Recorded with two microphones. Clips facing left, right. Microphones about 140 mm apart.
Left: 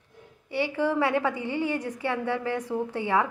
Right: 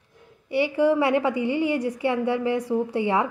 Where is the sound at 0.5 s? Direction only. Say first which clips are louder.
Right 6 dB; 15° right (ahead or behind).